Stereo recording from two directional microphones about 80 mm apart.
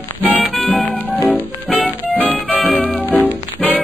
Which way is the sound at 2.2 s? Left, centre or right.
Left.